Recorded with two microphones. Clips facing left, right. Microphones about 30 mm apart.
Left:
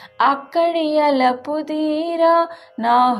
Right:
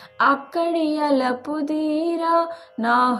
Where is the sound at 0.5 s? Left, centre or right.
Left.